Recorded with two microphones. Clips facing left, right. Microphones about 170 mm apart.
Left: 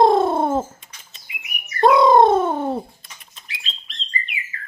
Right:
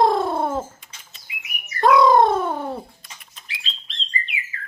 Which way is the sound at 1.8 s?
25° left (ahead or behind).